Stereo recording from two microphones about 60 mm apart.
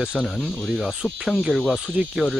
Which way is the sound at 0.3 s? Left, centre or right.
Centre.